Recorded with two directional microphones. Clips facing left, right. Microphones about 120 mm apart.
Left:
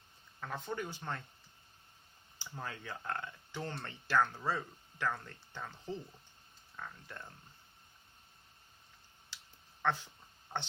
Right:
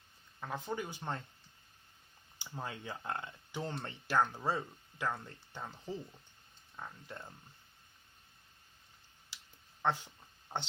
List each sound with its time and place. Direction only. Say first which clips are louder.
0.3 s speech: right 1 dB; 15° right (ahead or behind)
2.4 s speech: right 1 dB; 15° right (ahead or behind)
10.5 s speech: even; 20° right (ahead or behind)